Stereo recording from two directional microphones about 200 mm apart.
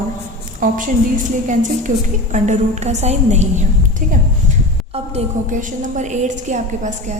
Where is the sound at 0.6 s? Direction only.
40° right (ahead or behind).